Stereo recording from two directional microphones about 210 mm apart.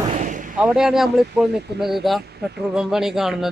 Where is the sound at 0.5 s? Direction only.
5° right (ahead or behind).